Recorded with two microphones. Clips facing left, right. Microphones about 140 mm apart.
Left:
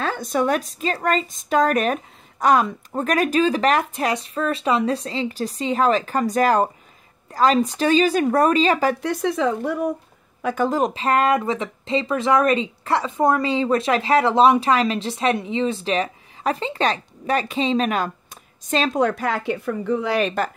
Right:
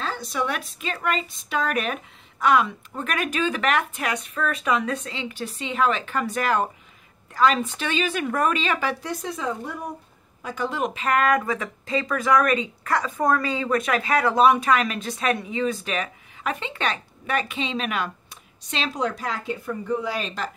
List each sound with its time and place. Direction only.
0.0 s speech: 50° left (ahead or behind)
9.0 s speech: 70° left (ahead or behind)
10.4 s speech: 50° left (ahead or behind)